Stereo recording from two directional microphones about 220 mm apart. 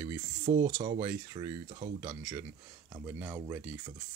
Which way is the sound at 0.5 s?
35° right (ahead or behind).